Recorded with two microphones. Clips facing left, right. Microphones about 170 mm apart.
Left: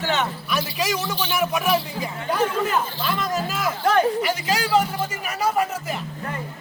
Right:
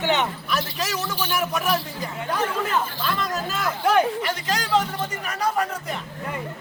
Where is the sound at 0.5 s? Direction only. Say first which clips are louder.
Left 4 dB; 10° left (ahead or behind).